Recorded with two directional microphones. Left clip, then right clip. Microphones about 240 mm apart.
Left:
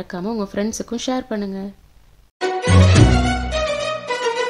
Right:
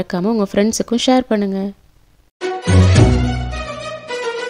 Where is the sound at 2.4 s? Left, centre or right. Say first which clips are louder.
Left 1 dB; centre.